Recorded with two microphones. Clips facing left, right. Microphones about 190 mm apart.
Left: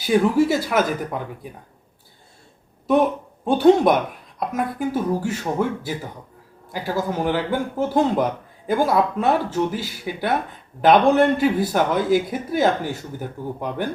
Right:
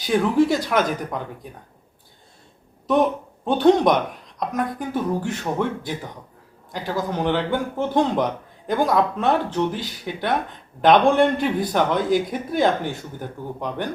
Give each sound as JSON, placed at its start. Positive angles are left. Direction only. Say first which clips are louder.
{"t": 0.0, "sound": "a man's voice", "louder": "left 1 dB", "side_deg": 5}
{"t": 3.4, "sound": "a man's voice", "louder": "left 2 dB", "side_deg": 10}